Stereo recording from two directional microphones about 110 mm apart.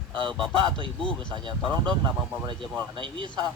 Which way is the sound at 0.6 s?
50° right (ahead or behind).